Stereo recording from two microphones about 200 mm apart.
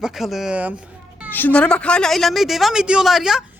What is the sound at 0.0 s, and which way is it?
Speech, centre (ahead or behind).